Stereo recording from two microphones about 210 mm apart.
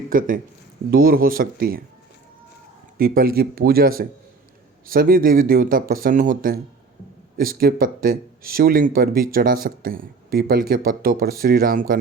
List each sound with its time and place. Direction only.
0.1 s speech: 40° right (ahead or behind)
3.0 s speech: 45° right (ahead or behind)